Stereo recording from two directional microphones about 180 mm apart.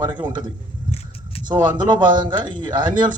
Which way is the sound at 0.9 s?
35° left (ahead or behind).